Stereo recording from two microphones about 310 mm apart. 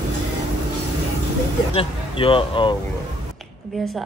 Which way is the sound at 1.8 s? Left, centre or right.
Centre.